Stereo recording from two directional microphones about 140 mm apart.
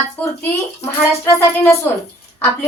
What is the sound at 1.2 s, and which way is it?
Speech, 20° left (ahead or behind).